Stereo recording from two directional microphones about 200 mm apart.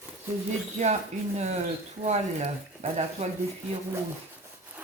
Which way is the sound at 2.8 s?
35° right (ahead or behind).